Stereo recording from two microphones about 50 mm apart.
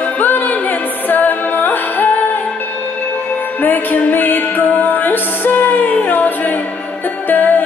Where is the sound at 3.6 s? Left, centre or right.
Left.